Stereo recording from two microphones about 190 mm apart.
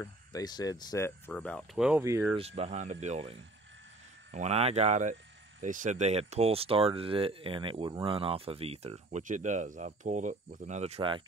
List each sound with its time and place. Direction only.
0.0 s speech: 20° left (ahead or behind)
1.9 s speech: 15° right (ahead or behind)
2.3 s speech: 30° right (ahead or behind)